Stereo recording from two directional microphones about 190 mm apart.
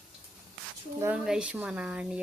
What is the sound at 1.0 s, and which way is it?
Speech, 5° right (ahead or behind).